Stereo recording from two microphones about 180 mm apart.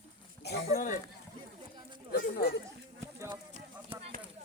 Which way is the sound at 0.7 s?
45° left (ahead or behind).